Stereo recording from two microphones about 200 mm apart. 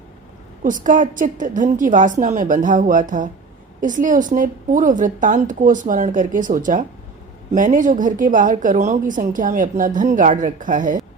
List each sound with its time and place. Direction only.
0.6 s a woman's voice: 40° right (ahead or behind)